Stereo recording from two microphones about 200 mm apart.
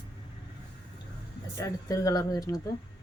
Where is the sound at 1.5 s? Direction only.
15° left (ahead or behind).